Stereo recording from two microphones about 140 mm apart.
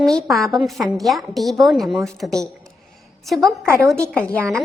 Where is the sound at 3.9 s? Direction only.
5° left (ahead or behind).